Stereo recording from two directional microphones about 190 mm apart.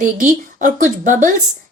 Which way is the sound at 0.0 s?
45° right (ahead or behind).